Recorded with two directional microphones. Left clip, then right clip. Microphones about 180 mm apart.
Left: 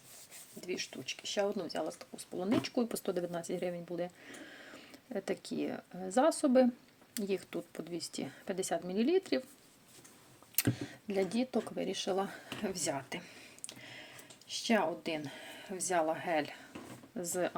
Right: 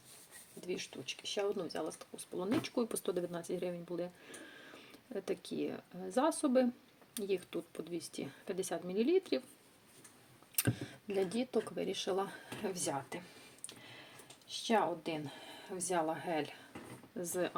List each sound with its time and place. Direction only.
0.8 s speech: 20° left (ahead or behind)
10.5 s speech: 15° left (ahead or behind)
14.7 s speech: 25° left (ahead or behind)